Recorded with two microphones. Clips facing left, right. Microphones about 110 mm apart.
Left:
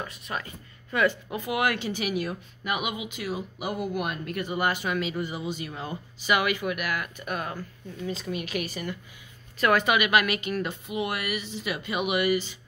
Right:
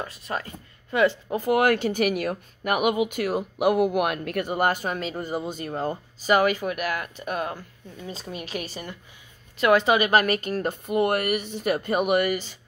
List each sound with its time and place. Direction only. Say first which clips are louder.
0.2 s a woman's voice: right 3 dB; 30° right (ahead or behind); by 12.5 s 45° right (ahead or behind)